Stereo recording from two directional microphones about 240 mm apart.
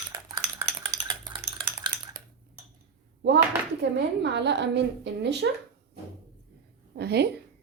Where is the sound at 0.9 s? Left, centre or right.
Centre.